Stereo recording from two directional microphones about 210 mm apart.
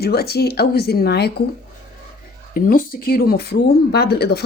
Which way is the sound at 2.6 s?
40° left (ahead or behind).